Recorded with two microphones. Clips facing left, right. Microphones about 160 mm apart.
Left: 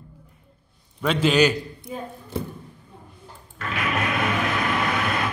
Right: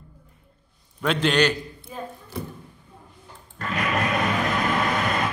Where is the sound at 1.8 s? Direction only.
20° left (ahead or behind).